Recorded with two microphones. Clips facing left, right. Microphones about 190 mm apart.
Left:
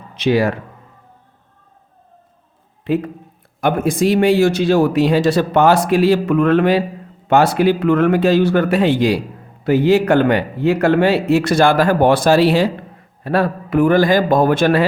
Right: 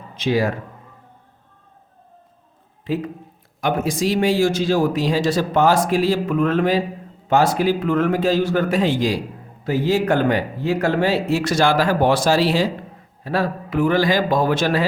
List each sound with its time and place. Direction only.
0.2 s speech: 70° left (ahead or behind)
2.8 s a man's voice: 60° left (ahead or behind)